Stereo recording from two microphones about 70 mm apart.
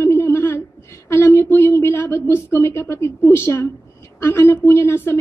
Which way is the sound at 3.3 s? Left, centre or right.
Left.